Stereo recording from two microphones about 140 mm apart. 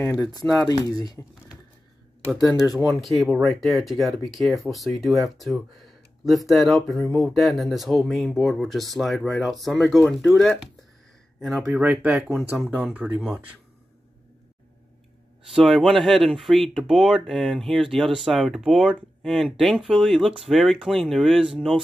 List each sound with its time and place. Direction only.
0.3 s speech: 30° left (ahead or behind)
2.8 s speech: centre (ahead or behind)
11.6 s speech: 10° right (ahead or behind)
15.4 s speech: centre (ahead or behind)